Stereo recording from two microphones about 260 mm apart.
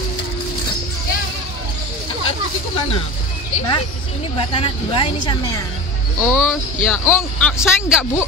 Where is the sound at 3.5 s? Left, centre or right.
Centre.